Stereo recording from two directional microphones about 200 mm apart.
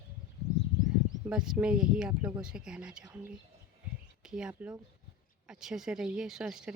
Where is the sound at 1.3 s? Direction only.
5° right (ahead or behind).